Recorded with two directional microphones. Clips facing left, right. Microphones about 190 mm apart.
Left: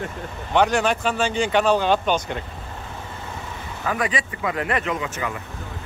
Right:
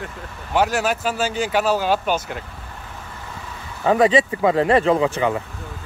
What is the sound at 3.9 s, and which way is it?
Speech, 25° right (ahead or behind).